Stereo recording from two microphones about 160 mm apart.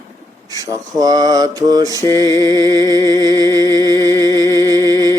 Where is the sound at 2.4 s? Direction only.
25° right (ahead or behind).